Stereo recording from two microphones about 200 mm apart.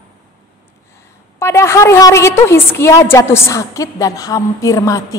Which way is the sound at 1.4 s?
15° left (ahead or behind).